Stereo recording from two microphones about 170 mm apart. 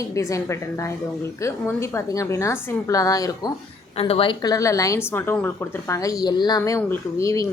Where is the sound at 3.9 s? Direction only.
35° left (ahead or behind).